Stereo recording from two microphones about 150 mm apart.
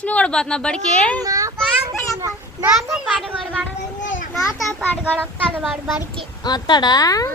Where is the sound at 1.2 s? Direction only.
25° right (ahead or behind).